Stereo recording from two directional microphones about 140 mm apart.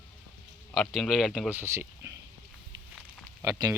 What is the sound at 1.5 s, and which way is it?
Speech, 15° right (ahead or behind).